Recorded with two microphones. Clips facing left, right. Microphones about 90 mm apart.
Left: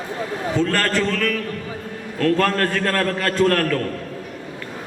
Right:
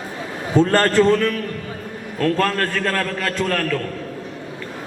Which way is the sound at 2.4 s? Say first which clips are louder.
Left 1 dB; centre (ahead or behind).